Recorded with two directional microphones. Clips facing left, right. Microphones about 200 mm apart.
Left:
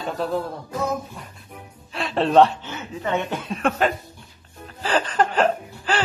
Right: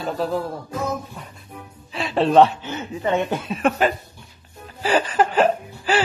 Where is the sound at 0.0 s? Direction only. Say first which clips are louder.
Right 1 dB; centre (ahead or behind).